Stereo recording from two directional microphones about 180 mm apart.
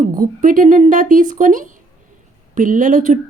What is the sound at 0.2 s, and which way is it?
A woman's voice, 50° right (ahead or behind).